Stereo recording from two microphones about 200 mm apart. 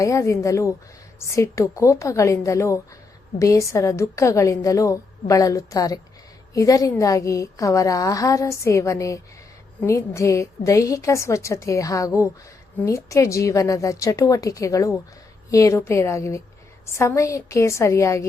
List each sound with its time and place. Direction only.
0.0 s a woman's voice: 15° left (ahead or behind)